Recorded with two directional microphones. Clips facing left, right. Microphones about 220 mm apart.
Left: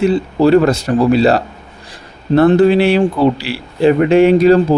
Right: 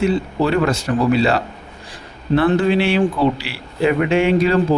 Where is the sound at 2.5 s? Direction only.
40° left (ahead or behind).